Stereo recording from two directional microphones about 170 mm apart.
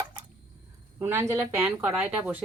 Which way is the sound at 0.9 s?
15° right (ahead or behind).